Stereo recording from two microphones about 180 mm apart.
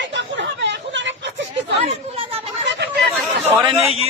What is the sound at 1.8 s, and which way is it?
Chatter, 35° right (ahead or behind).